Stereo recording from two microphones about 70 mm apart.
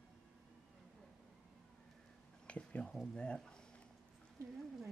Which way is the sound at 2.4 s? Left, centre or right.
Centre.